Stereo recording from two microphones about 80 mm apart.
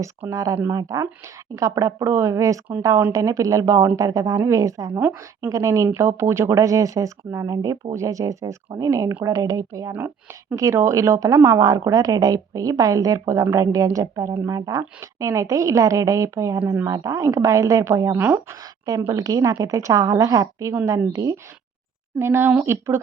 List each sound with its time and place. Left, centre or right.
0.3 s a woman's voice: right
4.9 s a woman's voice: right
5.5 s a woman's voice: right
18.1 s a woman's voice: right
18.6 s a woman's voice: right
22.2 s speech: right